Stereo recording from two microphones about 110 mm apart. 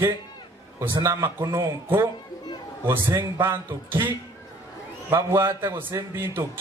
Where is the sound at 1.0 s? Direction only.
25° right (ahead or behind).